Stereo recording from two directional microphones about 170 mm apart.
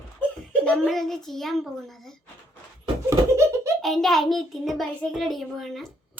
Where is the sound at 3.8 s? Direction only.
Centre (ahead or behind).